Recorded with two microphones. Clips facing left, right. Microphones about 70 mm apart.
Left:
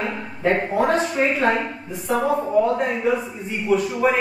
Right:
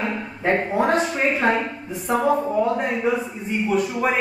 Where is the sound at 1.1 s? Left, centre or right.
Centre.